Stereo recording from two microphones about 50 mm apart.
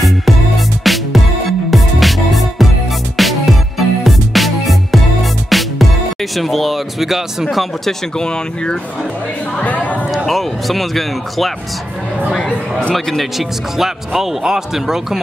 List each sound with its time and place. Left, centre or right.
0.8 s music: centre
6.3 s speech: centre
8.2 s speech: centre
9.6 s speech: left
10.1 s speech: centre
12.4 s speech: centre
12.9 s speech: centre